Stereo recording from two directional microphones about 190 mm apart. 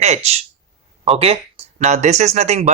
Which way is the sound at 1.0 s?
30° right (ahead or behind).